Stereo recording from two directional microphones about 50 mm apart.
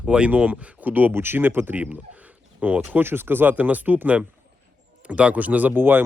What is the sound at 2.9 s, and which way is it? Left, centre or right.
Speech, right.